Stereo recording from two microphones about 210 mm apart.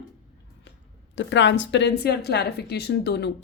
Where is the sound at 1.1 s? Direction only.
60° left (ahead or behind).